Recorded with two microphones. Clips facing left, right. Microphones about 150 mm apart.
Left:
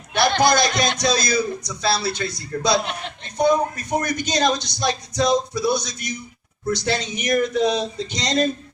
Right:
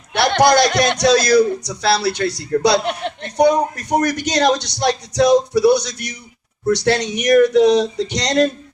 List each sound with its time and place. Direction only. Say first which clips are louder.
0.1 s a man's voice: right 4 dB; 65° right (ahead or behind)